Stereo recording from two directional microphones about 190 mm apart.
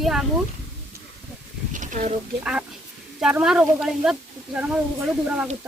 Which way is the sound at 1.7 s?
40° right (ahead or behind).